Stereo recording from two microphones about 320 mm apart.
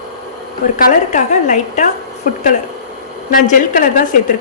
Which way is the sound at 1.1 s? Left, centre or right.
Left.